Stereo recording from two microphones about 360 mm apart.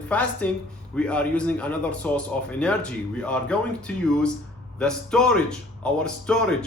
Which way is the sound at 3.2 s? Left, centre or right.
Centre.